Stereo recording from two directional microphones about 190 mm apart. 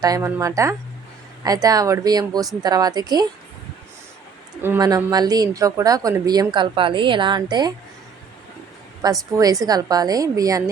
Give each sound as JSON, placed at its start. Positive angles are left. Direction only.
{"t": 0.0, "sound": "a woman's voice", "side_deg": -15}
{"t": 4.6, "sound": "speech", "side_deg": -15}
{"t": 9.0, "sound": "speech", "side_deg": -20}